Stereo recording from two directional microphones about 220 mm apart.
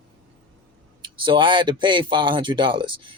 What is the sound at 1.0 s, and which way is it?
A man's voice, 20° right (ahead or behind).